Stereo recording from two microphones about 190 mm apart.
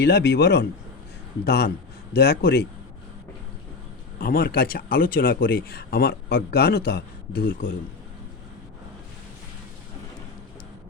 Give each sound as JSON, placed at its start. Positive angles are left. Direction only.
{"t": 0.0, "sound": "speech", "side_deg": 60}
{"t": 4.2, "sound": "speech", "side_deg": 50}